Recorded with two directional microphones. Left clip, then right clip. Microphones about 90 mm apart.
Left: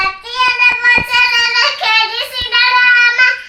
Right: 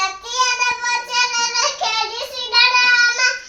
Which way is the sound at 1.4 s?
30° right (ahead or behind).